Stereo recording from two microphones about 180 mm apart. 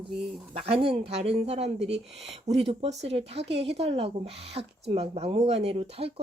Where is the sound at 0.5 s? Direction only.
35° right (ahead or behind).